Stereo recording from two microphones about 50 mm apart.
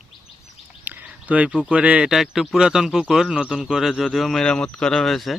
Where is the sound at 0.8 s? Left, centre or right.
Right.